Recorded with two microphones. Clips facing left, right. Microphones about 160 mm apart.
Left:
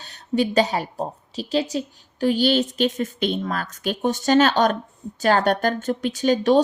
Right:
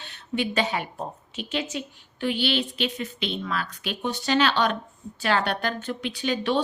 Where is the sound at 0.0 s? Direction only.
40° left (ahead or behind).